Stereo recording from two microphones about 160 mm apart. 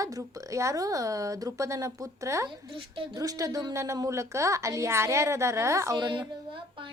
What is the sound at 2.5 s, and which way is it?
Speech, 30° right (ahead or behind).